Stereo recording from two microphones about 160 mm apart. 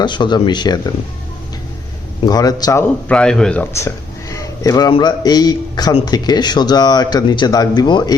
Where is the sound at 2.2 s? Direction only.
25° left (ahead or behind).